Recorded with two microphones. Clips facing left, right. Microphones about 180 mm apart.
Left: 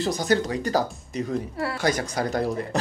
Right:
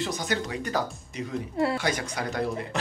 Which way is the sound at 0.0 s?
35° left (ahead or behind).